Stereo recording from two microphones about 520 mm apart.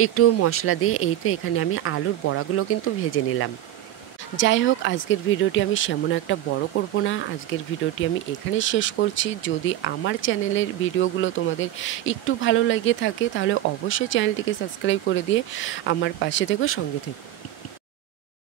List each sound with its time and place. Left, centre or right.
0.0 s speech: left